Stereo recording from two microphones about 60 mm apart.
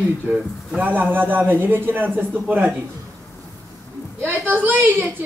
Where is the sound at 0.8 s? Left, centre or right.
Right.